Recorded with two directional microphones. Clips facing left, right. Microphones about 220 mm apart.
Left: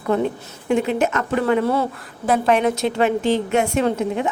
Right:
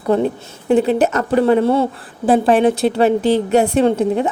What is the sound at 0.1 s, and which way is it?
A woman's voice, 35° right (ahead or behind).